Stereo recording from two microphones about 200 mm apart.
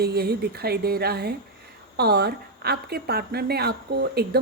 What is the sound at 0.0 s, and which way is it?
A woman's voice, 50° right (ahead or behind).